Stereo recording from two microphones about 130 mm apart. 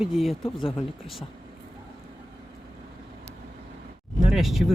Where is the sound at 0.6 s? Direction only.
40° left (ahead or behind).